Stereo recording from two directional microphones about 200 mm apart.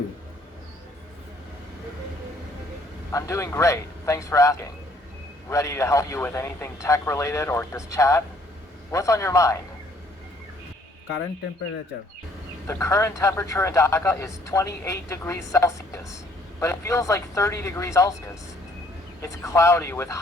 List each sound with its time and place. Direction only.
3.1 s a man's voice: 15° left (ahead or behind)
12.6 s a man's voice: 15° left (ahead or behind)
19.2 s a man's voice: 15° left (ahead or behind)